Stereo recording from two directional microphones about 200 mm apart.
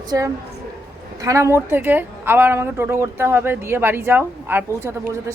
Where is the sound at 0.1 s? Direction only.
15° right (ahead or behind).